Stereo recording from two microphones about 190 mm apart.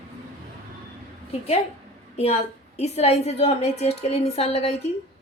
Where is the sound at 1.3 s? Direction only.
35° left (ahead or behind).